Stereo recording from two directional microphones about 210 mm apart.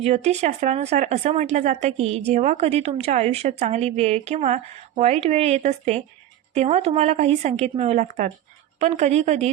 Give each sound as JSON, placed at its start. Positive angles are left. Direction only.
{"t": 0.0, "sound": "speech", "side_deg": -30}